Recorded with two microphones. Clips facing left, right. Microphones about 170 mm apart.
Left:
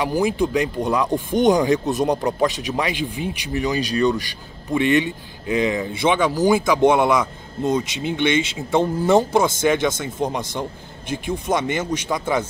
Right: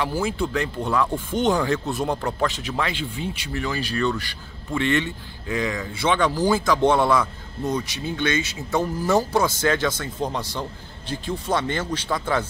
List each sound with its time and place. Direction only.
0.0 s a man's voice: 15° left (ahead or behind)